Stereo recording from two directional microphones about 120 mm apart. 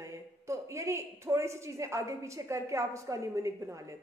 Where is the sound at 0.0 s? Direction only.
25° right (ahead or behind).